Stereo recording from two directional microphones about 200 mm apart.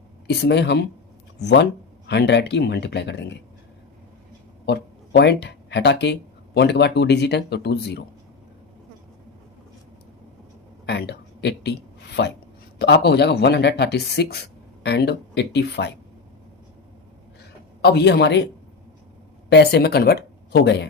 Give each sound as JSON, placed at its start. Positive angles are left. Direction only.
{"t": 0.3, "sound": "speech", "side_deg": 55}
{"t": 4.6, "sound": "speech", "side_deg": 55}
{"t": 10.8, "sound": "speech", "side_deg": 55}
{"t": 17.8, "sound": "speech", "side_deg": 55}
{"t": 19.5, "sound": "speech", "side_deg": 55}